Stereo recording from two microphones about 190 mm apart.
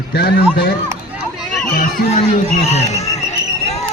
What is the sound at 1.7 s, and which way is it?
Speech, 40° left (ahead or behind).